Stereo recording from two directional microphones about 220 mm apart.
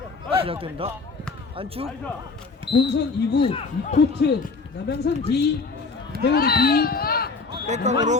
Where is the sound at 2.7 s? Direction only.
20° left (ahead or behind).